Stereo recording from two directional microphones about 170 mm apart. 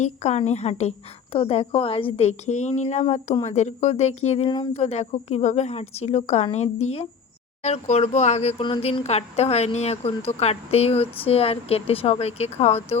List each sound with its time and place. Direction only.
0.0 s a woman's voice: 40° left (ahead or behind)
4.4 s speech: 25° left (ahead or behind)
4.7 s a woman's voice: 40° left (ahead or behind)